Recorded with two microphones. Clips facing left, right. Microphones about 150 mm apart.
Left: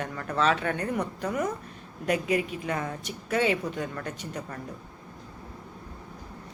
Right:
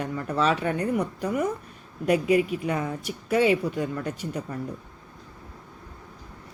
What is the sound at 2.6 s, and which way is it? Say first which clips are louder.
Speech: right 3 dB; 10° right (ahead or behind).